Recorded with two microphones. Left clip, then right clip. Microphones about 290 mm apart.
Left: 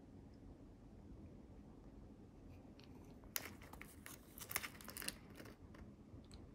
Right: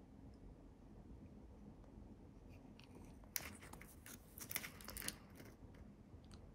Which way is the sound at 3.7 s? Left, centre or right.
Centre.